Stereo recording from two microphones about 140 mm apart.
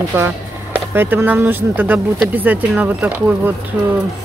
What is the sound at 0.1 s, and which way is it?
Speech, 15° right (ahead or behind).